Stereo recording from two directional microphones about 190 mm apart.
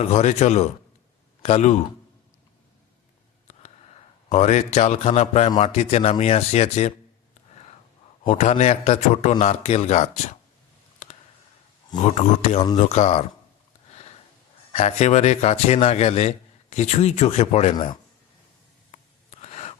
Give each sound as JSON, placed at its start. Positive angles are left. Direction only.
{"t": 0.0, "sound": "a man's voice", "side_deg": 35}
{"t": 3.4, "sound": "a sound", "side_deg": 35}
{"t": 5.6, "sound": "a man's voice", "side_deg": 35}
{"t": 8.2, "sound": "a man's voice", "side_deg": 35}
{"t": 11.9, "sound": "a man's voice", "side_deg": 35}
{"t": 14.7, "sound": "a man's voice", "side_deg": 35}
{"t": 18.9, "sound": "gasp", "side_deg": 35}